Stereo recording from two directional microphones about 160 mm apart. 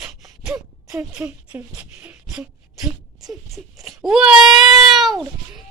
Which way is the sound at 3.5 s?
Centre (ahead or behind).